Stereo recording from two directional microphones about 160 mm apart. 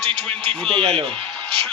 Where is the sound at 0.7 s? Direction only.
35° right (ahead or behind).